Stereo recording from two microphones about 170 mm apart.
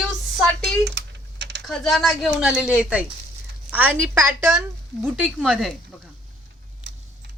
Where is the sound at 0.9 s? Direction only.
90° right.